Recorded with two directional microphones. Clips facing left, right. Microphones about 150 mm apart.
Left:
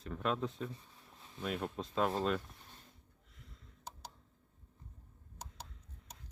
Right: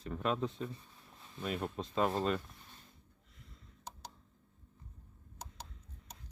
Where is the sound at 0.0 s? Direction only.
Centre (ahead or behind).